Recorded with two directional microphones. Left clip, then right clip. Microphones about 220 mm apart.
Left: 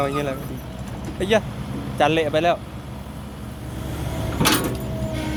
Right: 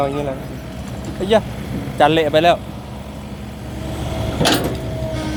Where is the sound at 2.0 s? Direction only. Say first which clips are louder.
Right 5 dB; 15° right (ahead or behind).